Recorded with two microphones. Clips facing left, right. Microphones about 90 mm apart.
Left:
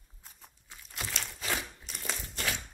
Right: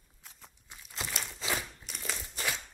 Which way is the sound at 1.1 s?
10° right (ahead or behind).